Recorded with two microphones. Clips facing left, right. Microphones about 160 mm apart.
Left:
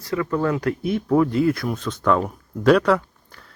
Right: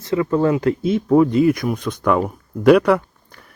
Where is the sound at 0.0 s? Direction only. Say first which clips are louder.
Right 5 dB; 25° right (ahead or behind).